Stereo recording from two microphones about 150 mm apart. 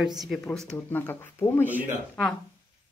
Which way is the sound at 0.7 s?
15° left (ahead or behind).